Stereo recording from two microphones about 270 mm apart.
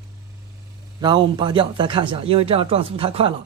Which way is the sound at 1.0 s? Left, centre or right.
Centre.